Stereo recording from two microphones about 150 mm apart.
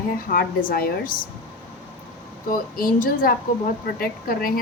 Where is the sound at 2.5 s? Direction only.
70° left (ahead or behind).